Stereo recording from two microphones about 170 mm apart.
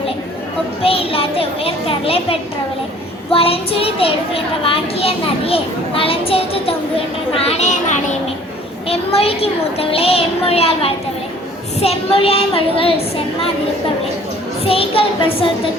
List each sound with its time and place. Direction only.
0.8 s a child's voice: 35° left (ahead or behind)
14.6 s a child's voice: 35° left (ahead or behind)